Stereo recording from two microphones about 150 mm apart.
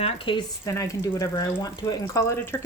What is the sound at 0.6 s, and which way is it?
Speech, 20° left (ahead or behind).